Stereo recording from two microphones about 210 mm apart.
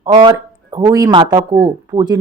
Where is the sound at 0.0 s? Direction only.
20° right (ahead or behind).